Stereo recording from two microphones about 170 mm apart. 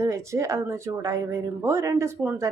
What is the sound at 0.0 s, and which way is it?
A woman's voice, 15° right (ahead or behind).